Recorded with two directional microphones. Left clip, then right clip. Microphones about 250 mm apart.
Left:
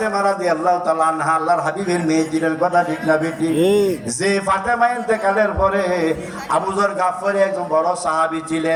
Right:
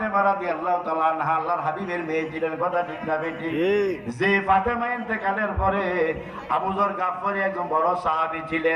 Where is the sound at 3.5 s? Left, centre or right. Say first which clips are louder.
Left 6 dB; centre.